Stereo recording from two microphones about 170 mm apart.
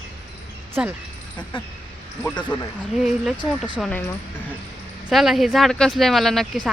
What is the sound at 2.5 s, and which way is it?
Speech, 25° left (ahead or behind).